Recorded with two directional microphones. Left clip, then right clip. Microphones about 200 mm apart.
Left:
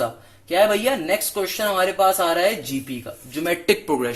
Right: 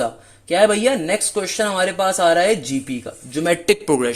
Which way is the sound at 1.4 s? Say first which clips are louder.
Even; 50° right (ahead or behind).